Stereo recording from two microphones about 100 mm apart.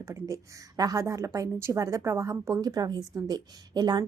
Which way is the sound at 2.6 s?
40° right (ahead or behind).